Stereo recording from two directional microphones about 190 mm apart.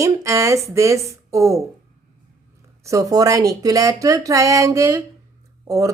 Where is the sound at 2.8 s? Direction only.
15° right (ahead or behind).